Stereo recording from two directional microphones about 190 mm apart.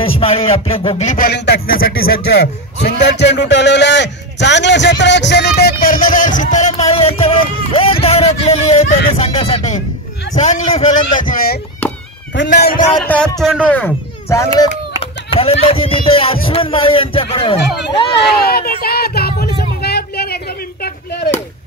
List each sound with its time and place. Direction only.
0.2 s a sound: 30° left (ahead or behind)
9.1 s music: 30° left (ahead or behind)
10.3 s a man's voice: 40° left (ahead or behind)
13.0 s speech: 10° left (ahead or behind)
15.0 s a man's voice: 30° left (ahead or behind)
18.3 s a sound: 55° left (ahead or behind)